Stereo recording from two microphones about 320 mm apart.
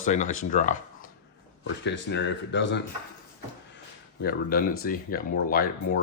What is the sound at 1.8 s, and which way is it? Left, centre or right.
Speech, left.